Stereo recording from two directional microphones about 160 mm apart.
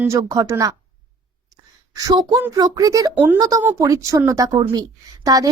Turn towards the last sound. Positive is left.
turn(degrees=-20)  # may be behind; listen again after turning